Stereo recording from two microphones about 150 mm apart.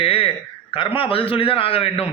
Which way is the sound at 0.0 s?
40° left (ahead or behind).